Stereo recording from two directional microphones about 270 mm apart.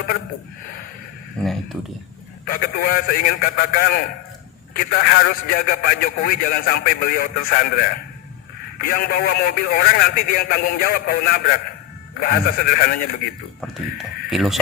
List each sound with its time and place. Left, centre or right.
2.5 s a man's voice: left
13.6 s speech: centre